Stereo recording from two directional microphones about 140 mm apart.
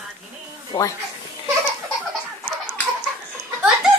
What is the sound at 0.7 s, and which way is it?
Speech, 25° left (ahead or behind).